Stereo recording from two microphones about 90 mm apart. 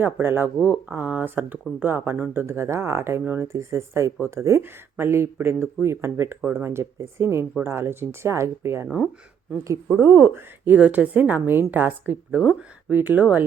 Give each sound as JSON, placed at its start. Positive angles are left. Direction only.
{"t": 0.0, "sound": "speech", "side_deg": -25}
{"t": 10.7, "sound": "speech", "side_deg": -15}